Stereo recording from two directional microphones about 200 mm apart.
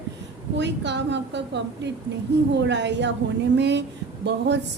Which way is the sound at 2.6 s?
60° right (ahead or behind).